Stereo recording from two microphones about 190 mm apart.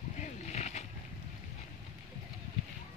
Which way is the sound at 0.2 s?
35° left (ahead or behind).